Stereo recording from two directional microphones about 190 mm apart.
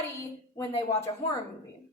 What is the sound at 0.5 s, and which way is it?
Speech, 15° left (ahead or behind).